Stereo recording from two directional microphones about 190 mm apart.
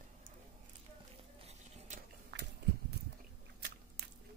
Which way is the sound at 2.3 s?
65° right (ahead or behind).